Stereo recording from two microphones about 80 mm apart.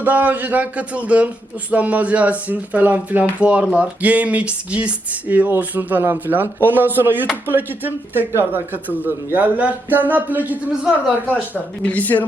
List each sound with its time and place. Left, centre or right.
0.0 s speech: right
11.8 s speech: centre